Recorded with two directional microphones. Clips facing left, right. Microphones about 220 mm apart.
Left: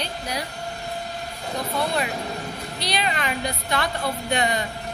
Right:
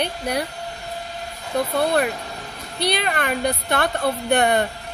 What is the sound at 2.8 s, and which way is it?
Speech, 55° right (ahead or behind).